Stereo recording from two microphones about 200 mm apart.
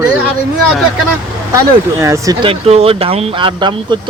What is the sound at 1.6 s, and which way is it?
Speech, 15° right (ahead or behind).